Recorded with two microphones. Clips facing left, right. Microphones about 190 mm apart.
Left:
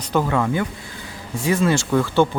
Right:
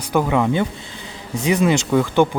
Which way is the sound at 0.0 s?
10° right (ahead or behind).